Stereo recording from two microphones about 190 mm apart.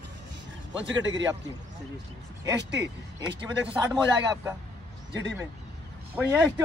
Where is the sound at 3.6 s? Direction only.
20° right (ahead or behind).